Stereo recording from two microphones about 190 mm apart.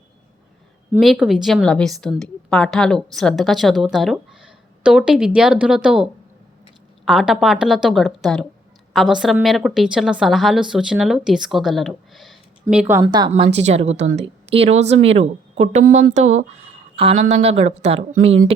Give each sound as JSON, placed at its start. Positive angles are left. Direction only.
{"t": 0.9, "sound": "a woman's voice", "side_deg": 0}
{"t": 13.0, "sound": "a woman's voice", "side_deg": -25}